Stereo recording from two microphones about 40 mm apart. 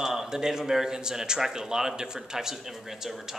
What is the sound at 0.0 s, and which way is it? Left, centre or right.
Speech, centre.